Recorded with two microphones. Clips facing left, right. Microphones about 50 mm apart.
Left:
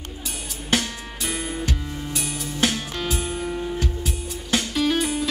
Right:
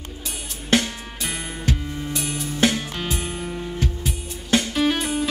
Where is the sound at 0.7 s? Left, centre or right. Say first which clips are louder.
Right 4 dB; centre.